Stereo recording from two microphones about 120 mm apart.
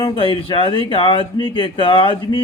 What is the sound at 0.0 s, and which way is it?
Speech, 45° left (ahead or behind).